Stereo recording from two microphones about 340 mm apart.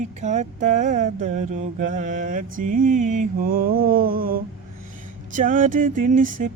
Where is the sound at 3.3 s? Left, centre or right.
Right.